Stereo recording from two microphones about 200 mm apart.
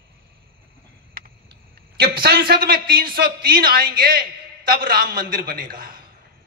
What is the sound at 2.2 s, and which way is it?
A man's voice, 50° right (ahead or behind).